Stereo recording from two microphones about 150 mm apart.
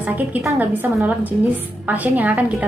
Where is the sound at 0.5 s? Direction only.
Centre (ahead or behind).